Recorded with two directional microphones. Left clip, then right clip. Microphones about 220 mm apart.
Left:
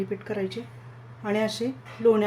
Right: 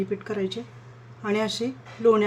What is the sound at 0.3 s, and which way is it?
A woman's voice, 15° right (ahead or behind).